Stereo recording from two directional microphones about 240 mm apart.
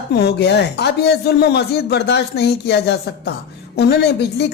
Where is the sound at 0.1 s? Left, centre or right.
Left.